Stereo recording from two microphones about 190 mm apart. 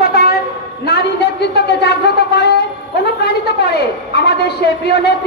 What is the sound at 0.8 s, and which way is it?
A man's voice, 60° left (ahead or behind).